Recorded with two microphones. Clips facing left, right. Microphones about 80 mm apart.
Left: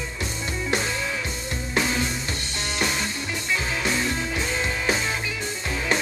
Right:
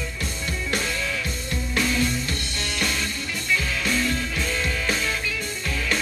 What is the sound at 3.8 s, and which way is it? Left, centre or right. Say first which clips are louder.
Music: right 1 dB; left.